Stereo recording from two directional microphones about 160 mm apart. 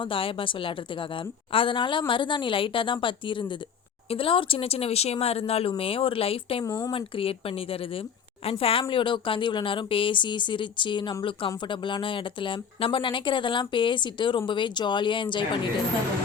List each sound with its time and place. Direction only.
0.0 s speech: 35° left (ahead or behind)
6.7 s speech: 20° left (ahead or behind)
6.9 s speech: 35° left (ahead or behind)